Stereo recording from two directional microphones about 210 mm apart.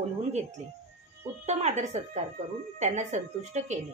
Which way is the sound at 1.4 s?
35° right (ahead or behind).